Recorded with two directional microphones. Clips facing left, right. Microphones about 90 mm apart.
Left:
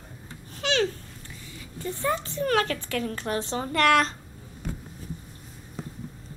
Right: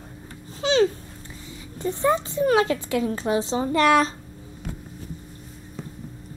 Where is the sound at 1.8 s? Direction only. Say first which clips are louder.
Right 6 dB; 25° right (ahead or behind).